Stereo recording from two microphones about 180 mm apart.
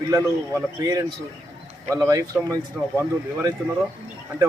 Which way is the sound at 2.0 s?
20° right (ahead or behind).